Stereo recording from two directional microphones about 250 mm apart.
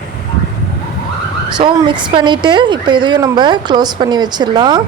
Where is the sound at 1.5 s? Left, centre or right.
Centre.